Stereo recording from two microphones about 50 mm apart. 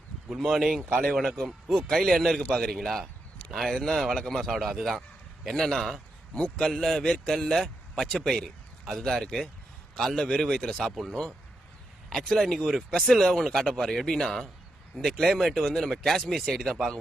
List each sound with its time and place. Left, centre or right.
0.3 s speech: centre
6.3 s a man's voice: centre
6.7 s a man's voice: centre
10.2 s speech: centre
10.8 s speech: centre
12.1 s speech: centre